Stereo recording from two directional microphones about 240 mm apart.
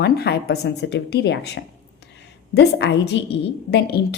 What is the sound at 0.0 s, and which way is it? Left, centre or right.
Speech, left.